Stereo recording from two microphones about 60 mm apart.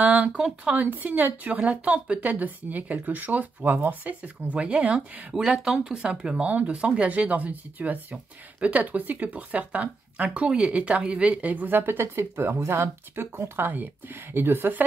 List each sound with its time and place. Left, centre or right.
0.0 s speech: centre; by 14.8 s right